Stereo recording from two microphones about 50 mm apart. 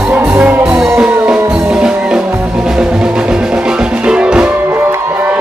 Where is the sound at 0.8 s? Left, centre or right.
Centre.